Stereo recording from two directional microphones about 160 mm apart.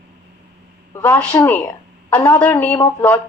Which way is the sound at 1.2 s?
10° left (ahead or behind).